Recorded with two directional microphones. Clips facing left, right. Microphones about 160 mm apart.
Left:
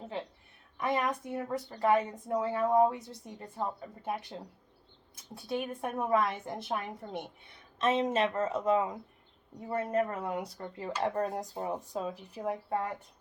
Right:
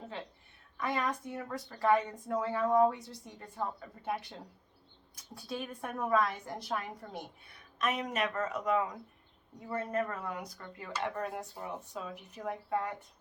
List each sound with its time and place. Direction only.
0.8 s a woman's voice: 20° left (ahead or behind)